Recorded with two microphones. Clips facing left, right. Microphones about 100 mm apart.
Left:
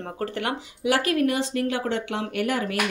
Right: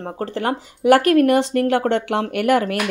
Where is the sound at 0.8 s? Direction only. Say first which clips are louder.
Right 9 dB; 55° right (ahead or behind).